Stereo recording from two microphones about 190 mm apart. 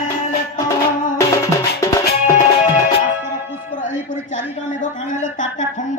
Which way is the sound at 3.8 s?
40° left (ahead or behind).